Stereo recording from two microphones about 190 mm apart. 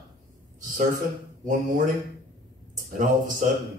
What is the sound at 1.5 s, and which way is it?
Speech, 45° right (ahead or behind).